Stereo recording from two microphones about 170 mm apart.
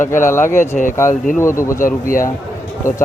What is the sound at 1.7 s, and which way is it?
Speech, 55° left (ahead or behind).